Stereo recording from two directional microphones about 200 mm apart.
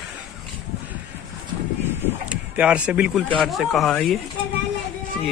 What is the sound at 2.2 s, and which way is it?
Speech, 5° right (ahead or behind).